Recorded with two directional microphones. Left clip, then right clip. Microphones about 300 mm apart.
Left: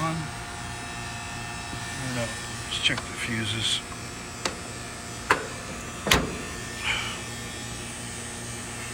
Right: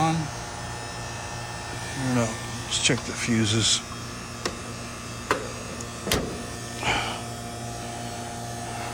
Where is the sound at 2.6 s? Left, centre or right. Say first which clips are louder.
Right 1 dB; centre.